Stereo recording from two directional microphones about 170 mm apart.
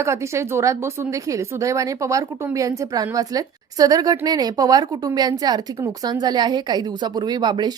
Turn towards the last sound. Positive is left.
turn(degrees=-25)  # may be behind; listen again after turning